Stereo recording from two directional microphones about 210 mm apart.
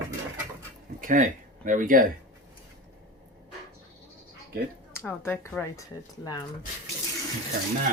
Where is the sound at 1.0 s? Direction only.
40° right (ahead or behind).